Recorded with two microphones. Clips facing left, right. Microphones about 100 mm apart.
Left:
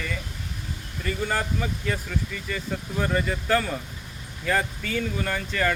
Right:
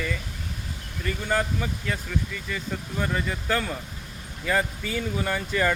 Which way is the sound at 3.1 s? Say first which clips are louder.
Left 4 dB; centre (ahead or behind).